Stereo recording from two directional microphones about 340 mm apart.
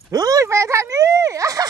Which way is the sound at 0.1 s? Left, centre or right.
Centre.